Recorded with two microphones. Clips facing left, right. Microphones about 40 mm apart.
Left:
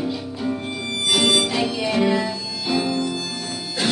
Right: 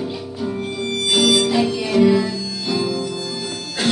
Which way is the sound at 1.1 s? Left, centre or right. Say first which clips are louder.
Right 2 dB; left.